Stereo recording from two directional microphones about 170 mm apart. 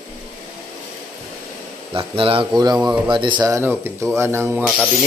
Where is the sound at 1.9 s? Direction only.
30° right (ahead or behind); by 4.6 s 15° right (ahead or behind).